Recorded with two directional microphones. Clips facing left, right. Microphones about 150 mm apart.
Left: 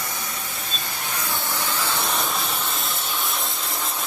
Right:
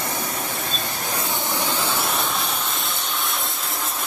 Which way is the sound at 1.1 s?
20° right (ahead or behind).